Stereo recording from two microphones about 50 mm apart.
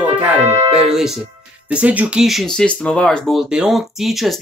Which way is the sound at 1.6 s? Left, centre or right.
Right.